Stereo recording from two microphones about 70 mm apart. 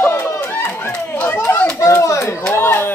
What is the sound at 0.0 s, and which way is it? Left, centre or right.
Chatter, left.